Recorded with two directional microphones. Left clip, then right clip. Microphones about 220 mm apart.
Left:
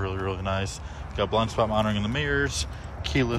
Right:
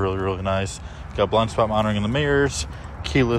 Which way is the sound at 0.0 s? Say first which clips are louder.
Right 6 dB; 5° left (ahead or behind).